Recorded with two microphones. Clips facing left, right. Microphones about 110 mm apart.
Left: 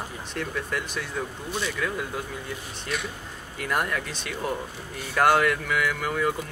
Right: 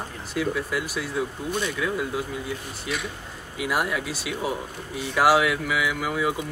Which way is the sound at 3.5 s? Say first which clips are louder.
Right 2 dB; 5° right (ahead or behind).